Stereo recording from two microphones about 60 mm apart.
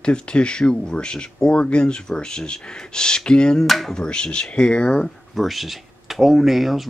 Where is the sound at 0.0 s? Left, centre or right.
Centre.